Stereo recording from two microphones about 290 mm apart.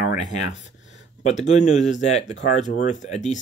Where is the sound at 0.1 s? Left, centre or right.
Left.